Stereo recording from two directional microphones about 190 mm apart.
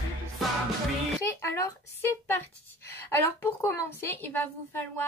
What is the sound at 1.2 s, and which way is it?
Speech, 15° left (ahead or behind).